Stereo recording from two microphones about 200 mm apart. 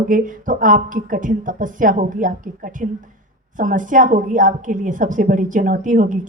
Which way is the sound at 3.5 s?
40° right (ahead or behind).